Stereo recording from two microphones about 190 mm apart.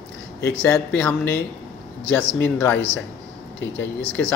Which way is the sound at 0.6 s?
10° left (ahead or behind).